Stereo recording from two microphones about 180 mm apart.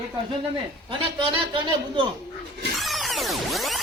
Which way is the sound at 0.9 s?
30° right (ahead or behind).